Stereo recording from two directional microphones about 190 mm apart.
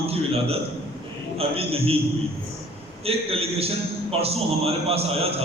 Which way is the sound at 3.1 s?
30° right (ahead or behind).